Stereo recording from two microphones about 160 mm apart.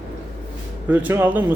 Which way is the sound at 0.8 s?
10° right (ahead or behind).